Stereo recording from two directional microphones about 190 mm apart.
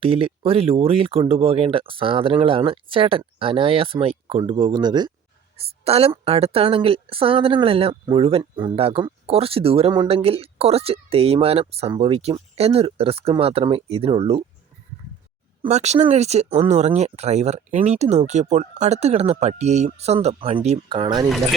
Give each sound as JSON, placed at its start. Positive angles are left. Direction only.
{"t": 0.0, "sound": "a woman's voice", "side_deg": -30}
{"t": 15.6, "sound": "a woman's voice", "side_deg": -35}